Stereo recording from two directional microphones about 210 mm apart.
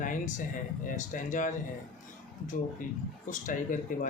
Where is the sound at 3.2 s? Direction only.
40° left (ahead or behind).